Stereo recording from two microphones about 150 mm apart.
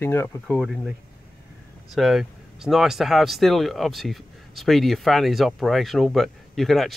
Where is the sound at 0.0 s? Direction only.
15° left (ahead or behind).